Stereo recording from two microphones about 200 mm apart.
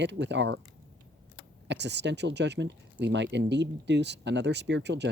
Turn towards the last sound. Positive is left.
turn(degrees=-60)  # may be behind; listen again after turning